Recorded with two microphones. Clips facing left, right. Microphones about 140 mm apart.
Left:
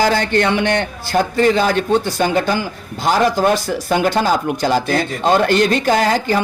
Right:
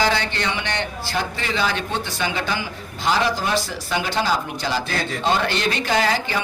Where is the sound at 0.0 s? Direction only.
45° left (ahead or behind).